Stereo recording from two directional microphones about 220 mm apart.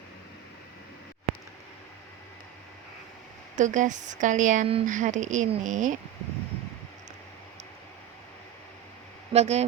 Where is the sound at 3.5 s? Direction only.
35° right (ahead or behind).